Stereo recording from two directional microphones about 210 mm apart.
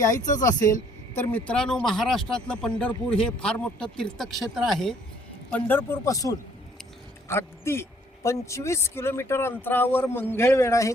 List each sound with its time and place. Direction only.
0.3 s speech: 40° left (ahead or behind)
0.7 s speech: 10° left (ahead or behind)